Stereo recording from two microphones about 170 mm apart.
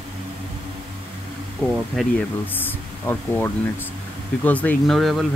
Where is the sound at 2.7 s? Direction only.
10° left (ahead or behind).